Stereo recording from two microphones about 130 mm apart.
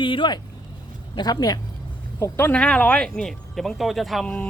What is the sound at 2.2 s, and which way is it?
Speech, 15° left (ahead or behind).